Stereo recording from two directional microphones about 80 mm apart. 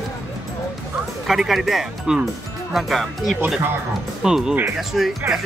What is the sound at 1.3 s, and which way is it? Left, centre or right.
Speech, centre.